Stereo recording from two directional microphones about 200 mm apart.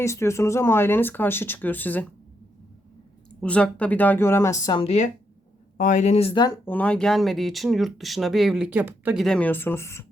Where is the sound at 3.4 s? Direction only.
5° left (ahead or behind); by 6.5 s 20° left (ahead or behind).